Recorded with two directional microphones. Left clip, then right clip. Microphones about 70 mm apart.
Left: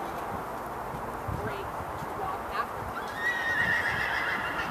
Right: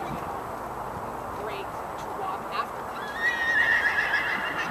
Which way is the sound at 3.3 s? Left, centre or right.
Right.